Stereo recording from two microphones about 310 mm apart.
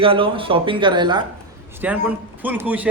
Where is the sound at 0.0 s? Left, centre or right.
Centre.